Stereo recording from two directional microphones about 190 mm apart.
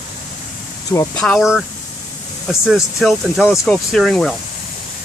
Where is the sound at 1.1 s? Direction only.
5° left (ahead or behind).